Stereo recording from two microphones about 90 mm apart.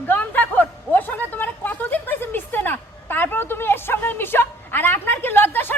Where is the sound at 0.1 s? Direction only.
20° left (ahead or behind).